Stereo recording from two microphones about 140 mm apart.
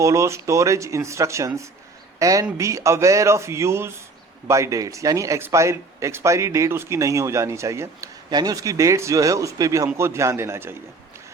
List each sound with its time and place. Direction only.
0.0 s speech: 20° right (ahead or behind)